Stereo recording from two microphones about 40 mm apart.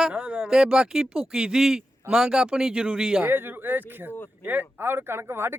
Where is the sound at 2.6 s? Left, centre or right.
Right.